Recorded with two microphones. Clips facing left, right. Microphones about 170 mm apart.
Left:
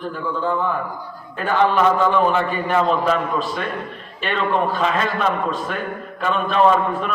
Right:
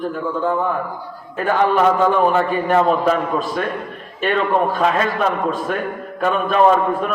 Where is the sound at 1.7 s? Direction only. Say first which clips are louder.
Right 2 dB; 50° right (ahead or behind).